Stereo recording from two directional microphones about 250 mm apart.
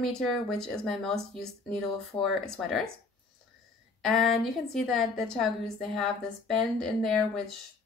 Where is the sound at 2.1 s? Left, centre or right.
Centre.